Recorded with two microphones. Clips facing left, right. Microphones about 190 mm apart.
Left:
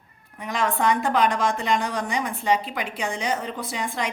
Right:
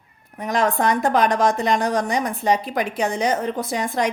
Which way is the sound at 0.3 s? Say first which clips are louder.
Right 5 dB; 40° right (ahead or behind).